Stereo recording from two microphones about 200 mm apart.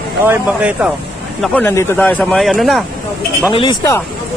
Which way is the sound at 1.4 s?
10° left (ahead or behind).